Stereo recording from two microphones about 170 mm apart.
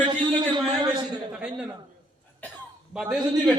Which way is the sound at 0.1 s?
25° right (ahead or behind).